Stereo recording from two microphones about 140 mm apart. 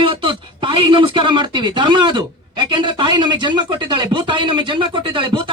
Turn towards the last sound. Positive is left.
turn(degrees=-35)  # may be behind; listen again after turning